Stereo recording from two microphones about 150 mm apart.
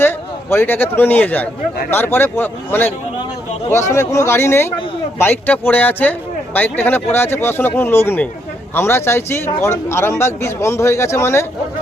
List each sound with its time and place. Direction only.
0.5 s speech: 15° left (ahead or behind)